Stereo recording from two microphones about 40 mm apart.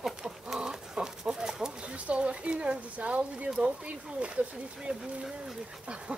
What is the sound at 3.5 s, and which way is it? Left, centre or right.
Speech, right.